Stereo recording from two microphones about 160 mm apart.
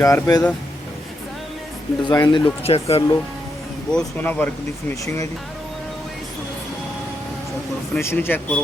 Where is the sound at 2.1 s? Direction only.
25° left (ahead or behind).